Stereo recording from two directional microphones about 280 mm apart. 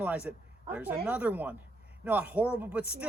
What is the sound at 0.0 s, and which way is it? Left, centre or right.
Speech, centre.